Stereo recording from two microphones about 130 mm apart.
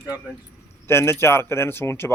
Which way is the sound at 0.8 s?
20° left (ahead or behind).